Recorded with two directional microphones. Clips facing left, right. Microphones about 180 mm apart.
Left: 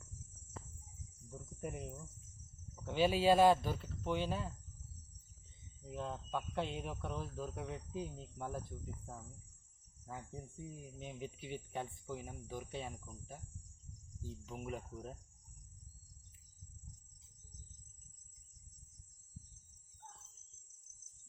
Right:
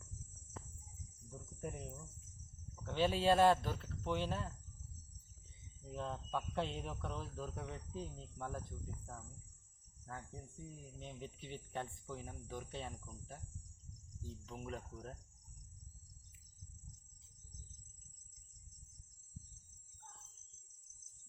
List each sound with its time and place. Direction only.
1.3 s speech: 10° left (ahead or behind)
5.8 s speech: 5° left (ahead or behind)
10.1 s speech: 15° left (ahead or behind)